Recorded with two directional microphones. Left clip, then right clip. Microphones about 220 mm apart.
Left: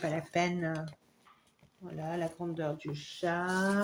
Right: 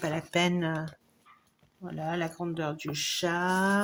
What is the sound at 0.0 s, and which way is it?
Speech, 40° right (ahead or behind).